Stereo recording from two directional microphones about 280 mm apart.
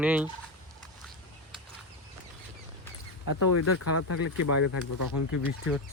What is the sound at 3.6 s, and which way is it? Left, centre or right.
Speech, left.